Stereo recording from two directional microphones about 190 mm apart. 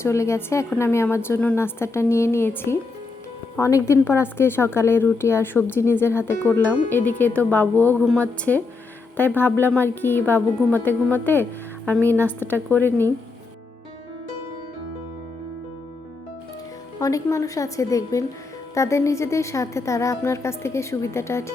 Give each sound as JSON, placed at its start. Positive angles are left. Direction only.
{"t": 0.0, "sound": "a woman's voice", "side_deg": 15}
{"t": 17.0, "sound": "a woman's voice", "side_deg": 15}